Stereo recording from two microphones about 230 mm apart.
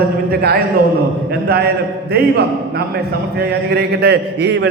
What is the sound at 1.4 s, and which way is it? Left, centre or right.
Speech, right.